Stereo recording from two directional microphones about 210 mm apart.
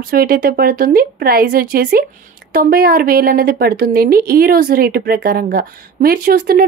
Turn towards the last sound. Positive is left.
turn(degrees=-45)  # may be behind; listen again after turning